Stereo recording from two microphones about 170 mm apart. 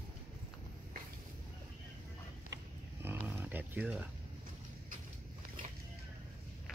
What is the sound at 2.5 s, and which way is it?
Roaring cats, 20° right (ahead or behind).